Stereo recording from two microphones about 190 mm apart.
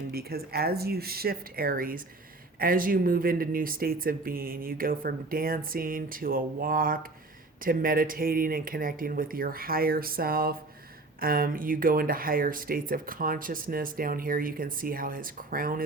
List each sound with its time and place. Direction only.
0.1 s speech: 55° right (ahead or behind)